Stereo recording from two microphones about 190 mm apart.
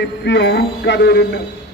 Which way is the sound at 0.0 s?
70° left (ahead or behind).